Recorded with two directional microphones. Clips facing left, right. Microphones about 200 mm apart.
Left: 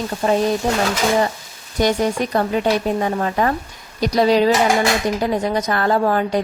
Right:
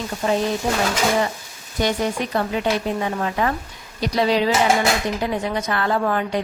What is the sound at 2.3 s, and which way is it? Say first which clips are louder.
A woman's voice: left 4 dB; 45° left (ahead or behind).